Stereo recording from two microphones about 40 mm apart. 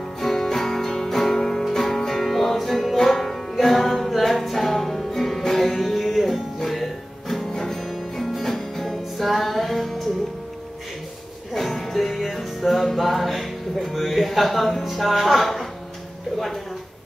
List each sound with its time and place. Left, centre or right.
0.2 s music: centre
11.5 s music: centre